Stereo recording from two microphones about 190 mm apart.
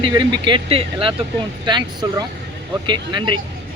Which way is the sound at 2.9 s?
25° right (ahead or behind).